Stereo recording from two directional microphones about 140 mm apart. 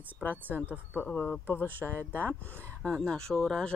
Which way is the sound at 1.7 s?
15° right (ahead or behind).